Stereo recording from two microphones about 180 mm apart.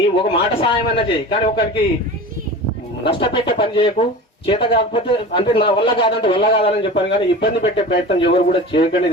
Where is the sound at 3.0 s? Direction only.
30° left (ahead or behind).